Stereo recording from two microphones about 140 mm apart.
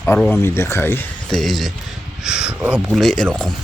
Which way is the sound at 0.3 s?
20° left (ahead or behind).